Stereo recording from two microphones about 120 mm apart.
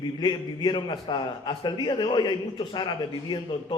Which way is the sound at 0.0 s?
40° left (ahead or behind).